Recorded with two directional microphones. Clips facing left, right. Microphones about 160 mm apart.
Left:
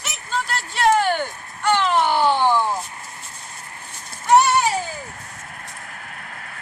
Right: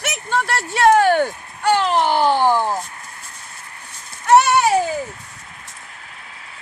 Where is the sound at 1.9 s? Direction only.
20° right (ahead or behind).